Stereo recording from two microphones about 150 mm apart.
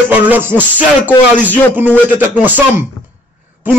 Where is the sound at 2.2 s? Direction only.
10° right (ahead or behind).